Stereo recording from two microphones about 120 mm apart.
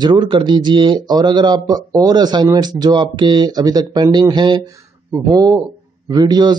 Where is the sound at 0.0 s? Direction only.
40° right (ahead or behind).